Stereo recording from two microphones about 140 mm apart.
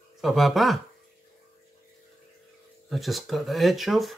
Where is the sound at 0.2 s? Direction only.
Centre (ahead or behind).